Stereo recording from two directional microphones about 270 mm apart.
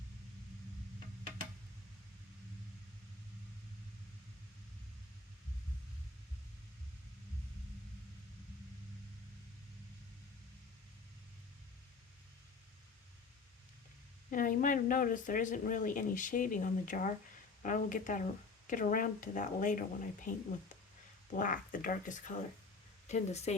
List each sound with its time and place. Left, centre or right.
14.3 s speech: left
21.3 s speech: left